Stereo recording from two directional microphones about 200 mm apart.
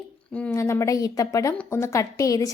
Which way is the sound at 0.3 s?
5° left (ahead or behind).